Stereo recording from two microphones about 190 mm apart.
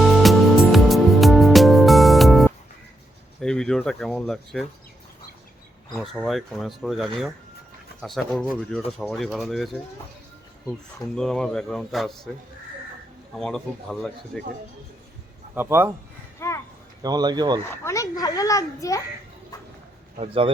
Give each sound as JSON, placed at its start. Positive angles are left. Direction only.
{"t": 0.0, "sound": "music", "side_deg": 0}
{"t": 3.4, "sound": "speech", "side_deg": 5}
{"t": 6.0, "sound": "a man's voice", "side_deg": 0}
{"t": 10.7, "sound": "a man's voice", "side_deg": 5}
{"t": 13.3, "sound": "a man's voice", "side_deg": 0}
{"t": 15.5, "sound": "a man's voice", "side_deg": -10}
{"t": 16.4, "sound": "speech", "side_deg": 15}
{"t": 17.0, "sound": "speech", "side_deg": -20}
{"t": 17.7, "sound": "a child's voice", "side_deg": 15}
{"t": 20.1, "sound": "speech", "side_deg": -30}